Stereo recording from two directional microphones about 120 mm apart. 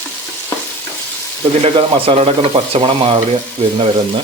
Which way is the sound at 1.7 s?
45° right (ahead or behind).